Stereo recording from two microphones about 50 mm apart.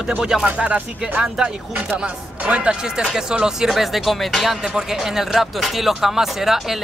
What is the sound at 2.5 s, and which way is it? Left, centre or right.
Speech, right.